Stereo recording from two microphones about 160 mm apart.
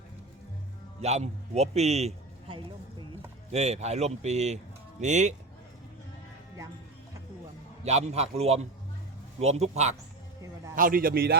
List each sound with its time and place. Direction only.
1.0 s a man's voice: 40° right (ahead or behind)
7.9 s a man's voice: 40° right (ahead or behind)
10.8 s a man's voice: 60° right (ahead or behind)